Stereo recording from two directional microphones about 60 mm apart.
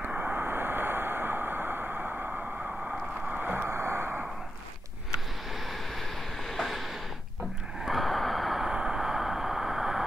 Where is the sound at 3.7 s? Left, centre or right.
Right.